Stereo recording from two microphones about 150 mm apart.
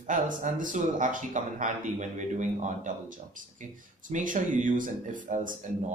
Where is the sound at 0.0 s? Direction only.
55° right (ahead or behind).